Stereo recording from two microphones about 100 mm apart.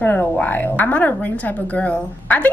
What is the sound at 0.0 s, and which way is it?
A woman's voice, 15° left (ahead or behind).